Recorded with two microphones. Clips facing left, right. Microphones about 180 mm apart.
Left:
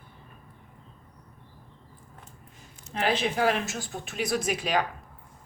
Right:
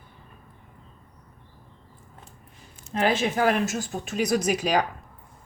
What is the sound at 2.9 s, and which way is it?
Speech, 45° right (ahead or behind).